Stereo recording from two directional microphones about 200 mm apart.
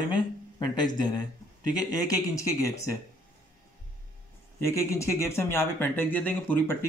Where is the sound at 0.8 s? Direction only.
20° left (ahead or behind).